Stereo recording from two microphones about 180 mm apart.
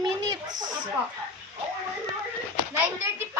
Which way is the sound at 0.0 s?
20° right (ahead or behind).